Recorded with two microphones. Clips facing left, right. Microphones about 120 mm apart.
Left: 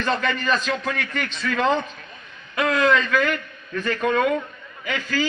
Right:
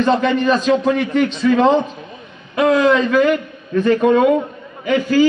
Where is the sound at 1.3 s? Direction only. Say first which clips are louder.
Right 7 dB; 25° right (ahead or behind).